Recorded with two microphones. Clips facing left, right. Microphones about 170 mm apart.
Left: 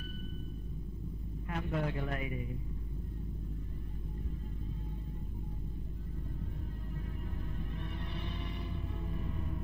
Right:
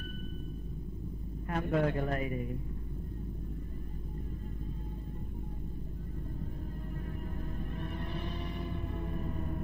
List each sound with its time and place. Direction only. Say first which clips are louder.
1.5 s a man's voice: right 6 dB; 50° right (ahead or behind)
2.0 s a man's voice: right 4 dB; 40° right (ahead or behind)
7.4 s music: right 3 dB; 45° right (ahead or behind)